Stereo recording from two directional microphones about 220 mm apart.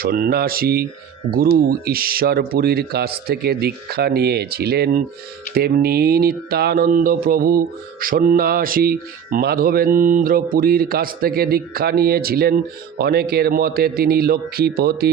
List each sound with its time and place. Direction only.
0.0 s speech: 40° right (ahead or behind)